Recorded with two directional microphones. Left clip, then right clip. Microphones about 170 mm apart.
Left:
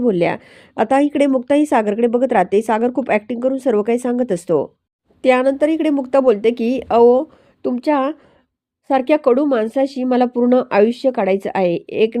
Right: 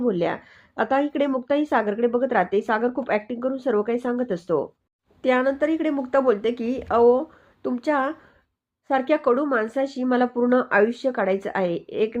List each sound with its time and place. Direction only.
0.0 s speech: 40° left (ahead or behind)